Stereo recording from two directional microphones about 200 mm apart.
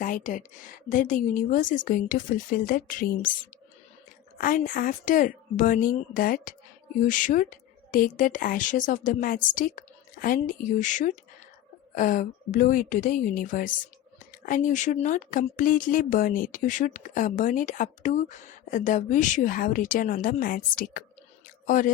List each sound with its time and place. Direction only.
0.0 s a woman's voice: 40° left (ahead or behind)